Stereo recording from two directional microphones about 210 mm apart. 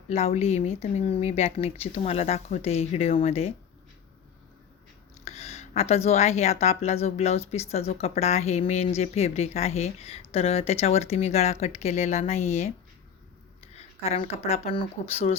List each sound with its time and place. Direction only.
0.1 s speech: 30° left (ahead or behind)
5.2 s a woman's voice: 30° left (ahead or behind)
13.7 s speech: 30° left (ahead or behind)